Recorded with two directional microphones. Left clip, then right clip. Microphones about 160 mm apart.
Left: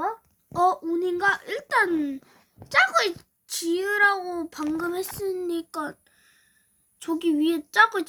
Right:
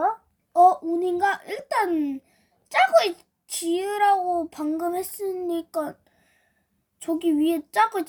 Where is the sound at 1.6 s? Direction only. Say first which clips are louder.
Left 1 dB; 45° left (ahead or behind).